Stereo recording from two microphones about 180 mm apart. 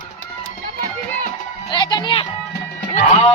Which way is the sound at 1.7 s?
25° left (ahead or behind).